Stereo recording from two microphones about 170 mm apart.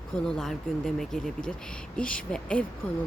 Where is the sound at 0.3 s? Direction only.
5° left (ahead or behind).